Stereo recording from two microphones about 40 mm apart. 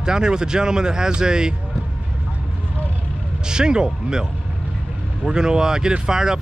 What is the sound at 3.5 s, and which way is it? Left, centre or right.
Speech, centre.